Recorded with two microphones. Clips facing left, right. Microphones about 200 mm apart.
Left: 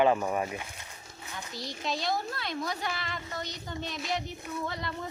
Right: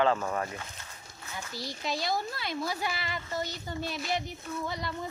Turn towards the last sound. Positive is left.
turn(degrees=0)  # may be behind; listen again after turning